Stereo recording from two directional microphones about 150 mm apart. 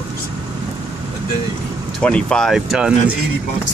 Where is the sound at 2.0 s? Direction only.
5° left (ahead or behind).